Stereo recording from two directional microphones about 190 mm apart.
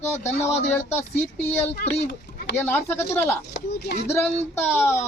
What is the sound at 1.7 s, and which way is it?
Speech, 55° left (ahead or behind).